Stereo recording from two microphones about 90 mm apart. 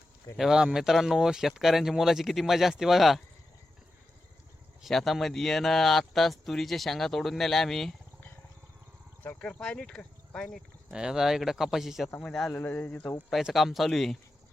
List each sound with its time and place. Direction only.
0.3 s speech: 5° right (ahead or behind)
4.8 s speech: centre (ahead or behind)
9.2 s speech: 10° left (ahead or behind)
10.9 s speech: 5° right (ahead or behind)
12.5 s speech: 20° left (ahead or behind)
13.3 s speech: centre (ahead or behind)